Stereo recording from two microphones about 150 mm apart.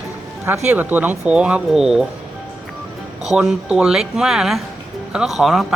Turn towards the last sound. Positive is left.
turn(degrees=0)  # may be behind; listen again after turning